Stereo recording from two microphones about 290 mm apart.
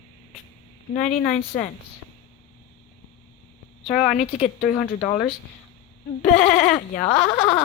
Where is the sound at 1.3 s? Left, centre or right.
Left.